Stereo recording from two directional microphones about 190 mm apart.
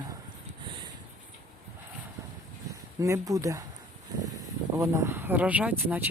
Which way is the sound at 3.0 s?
15° right (ahead or behind).